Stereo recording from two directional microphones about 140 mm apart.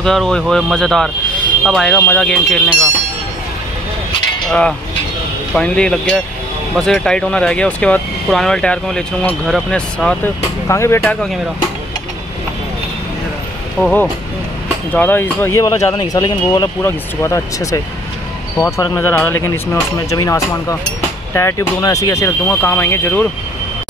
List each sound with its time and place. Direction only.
0.0 s speech: 5° left (ahead or behind)
4.5 s speech: 5° left (ahead or behind)
10.7 s speech: 20° left (ahead or behind)
13.8 s speech: 15° left (ahead or behind)